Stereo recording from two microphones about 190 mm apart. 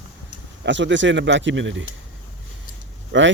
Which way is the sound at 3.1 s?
70° right (ahead or behind).